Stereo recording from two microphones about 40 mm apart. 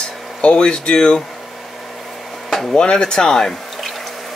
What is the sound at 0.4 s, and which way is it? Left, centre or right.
Speech, left.